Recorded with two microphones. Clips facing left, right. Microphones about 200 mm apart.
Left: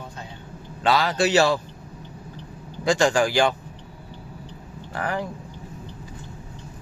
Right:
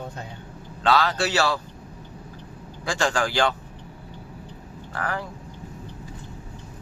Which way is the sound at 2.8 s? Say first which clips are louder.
Left 5 dB; 15° left (ahead or behind).